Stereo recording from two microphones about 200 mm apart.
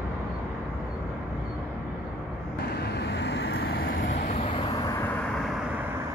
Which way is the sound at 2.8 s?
55° left (ahead or behind).